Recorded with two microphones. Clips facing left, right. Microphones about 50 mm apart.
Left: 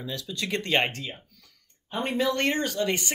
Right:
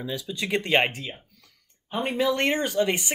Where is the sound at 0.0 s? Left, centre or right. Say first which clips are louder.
Right 2 dB; centre.